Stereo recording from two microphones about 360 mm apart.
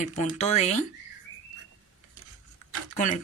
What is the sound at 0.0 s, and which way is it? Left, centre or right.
Speech, centre.